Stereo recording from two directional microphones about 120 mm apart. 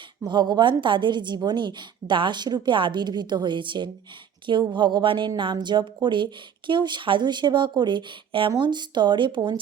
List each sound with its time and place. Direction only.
0.2 s a woman's voice: 40° right (ahead or behind)